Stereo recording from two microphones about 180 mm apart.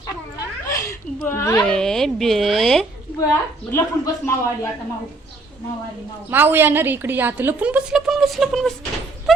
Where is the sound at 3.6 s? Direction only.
15° left (ahead or behind).